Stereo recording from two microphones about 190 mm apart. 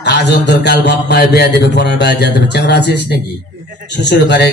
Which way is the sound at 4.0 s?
65° left (ahead or behind).